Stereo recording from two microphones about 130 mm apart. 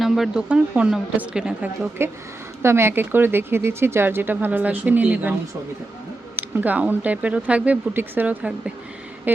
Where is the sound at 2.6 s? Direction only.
20° right (ahead or behind).